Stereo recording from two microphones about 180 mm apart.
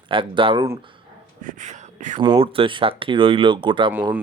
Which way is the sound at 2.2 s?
30° right (ahead or behind).